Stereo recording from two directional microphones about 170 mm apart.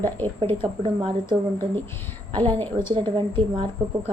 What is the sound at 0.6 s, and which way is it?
Speech, 30° right (ahead or behind).